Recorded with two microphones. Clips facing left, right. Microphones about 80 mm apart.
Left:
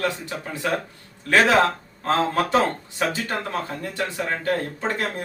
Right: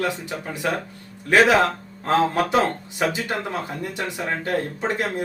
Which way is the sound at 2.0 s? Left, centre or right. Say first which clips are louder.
Right 2 dB; centre.